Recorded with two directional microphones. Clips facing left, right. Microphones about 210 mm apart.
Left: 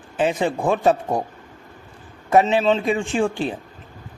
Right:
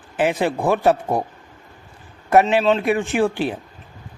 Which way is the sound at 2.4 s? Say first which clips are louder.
Right 1 dB; 5° right (ahead or behind).